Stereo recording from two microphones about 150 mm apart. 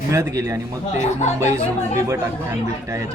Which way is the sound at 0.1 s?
20° right (ahead or behind).